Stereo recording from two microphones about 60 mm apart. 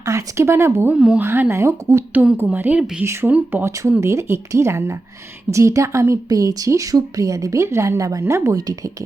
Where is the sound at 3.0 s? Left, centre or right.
Right.